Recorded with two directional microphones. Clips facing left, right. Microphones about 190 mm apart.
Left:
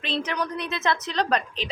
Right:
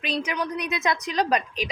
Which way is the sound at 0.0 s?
10° right (ahead or behind).